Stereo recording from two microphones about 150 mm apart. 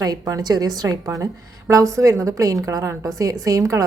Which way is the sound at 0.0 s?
25° right (ahead or behind).